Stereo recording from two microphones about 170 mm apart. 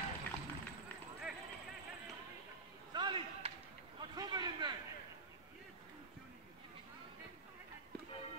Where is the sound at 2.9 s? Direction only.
25° right (ahead or behind).